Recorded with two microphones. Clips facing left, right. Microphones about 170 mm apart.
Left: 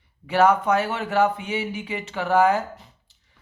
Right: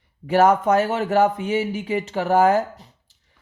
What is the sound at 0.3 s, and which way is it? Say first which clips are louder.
Speech: right 2 dB; 45° right (ahead or behind).